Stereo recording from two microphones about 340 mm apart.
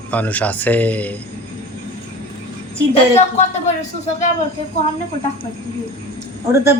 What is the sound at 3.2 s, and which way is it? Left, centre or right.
Speech, left.